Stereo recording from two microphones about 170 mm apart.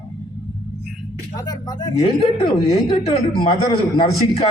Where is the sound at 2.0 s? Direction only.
35° left (ahead or behind).